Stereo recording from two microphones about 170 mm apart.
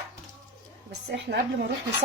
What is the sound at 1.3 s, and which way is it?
Speech, 75° right (ahead or behind).